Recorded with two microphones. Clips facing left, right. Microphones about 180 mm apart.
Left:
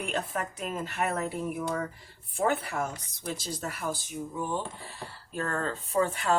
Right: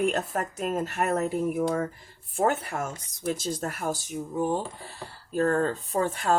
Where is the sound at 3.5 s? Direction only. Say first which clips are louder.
Right 4 dB; 50° right (ahead or behind).